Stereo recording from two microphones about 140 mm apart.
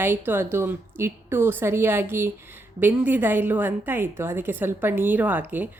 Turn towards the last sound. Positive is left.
turn(degrees=-10)  # may be behind; listen again after turning